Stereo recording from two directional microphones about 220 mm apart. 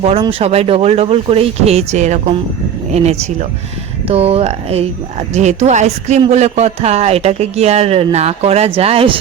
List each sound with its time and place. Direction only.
0.0 s speech: 25° right (ahead or behind)